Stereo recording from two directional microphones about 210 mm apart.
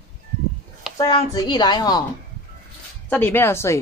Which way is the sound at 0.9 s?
20° left (ahead or behind).